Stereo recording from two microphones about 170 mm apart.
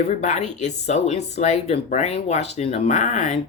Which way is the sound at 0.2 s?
40° left (ahead or behind).